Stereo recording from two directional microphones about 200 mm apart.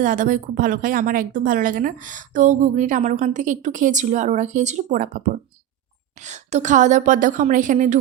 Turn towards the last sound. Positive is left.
turn(degrees=-40)  # may be behind; listen again after turning